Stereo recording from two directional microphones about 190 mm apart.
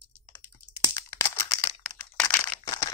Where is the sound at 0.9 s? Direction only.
15° left (ahead or behind).